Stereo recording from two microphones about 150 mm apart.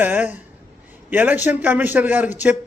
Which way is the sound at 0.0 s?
10° right (ahead or behind).